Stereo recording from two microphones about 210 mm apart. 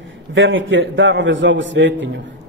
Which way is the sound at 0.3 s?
65° right (ahead or behind).